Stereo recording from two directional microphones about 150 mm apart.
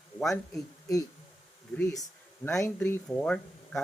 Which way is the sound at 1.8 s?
20° left (ahead or behind).